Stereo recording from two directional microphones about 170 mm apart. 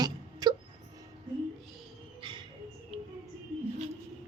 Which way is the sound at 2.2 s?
30° right (ahead or behind).